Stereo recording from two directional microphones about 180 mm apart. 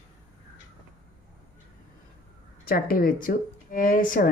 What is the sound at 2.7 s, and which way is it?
Speech, 55° left (ahead or behind).